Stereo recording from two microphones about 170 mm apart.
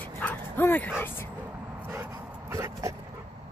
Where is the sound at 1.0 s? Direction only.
15° left (ahead or behind).